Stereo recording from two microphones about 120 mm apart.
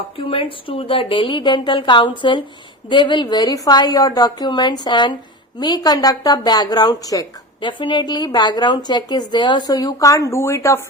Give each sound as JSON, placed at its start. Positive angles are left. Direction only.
{"t": 0.2, "sound": "a woman's voice", "side_deg": 50}